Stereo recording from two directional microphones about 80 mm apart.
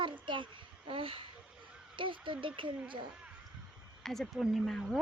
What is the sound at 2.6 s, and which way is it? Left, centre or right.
Speech, right.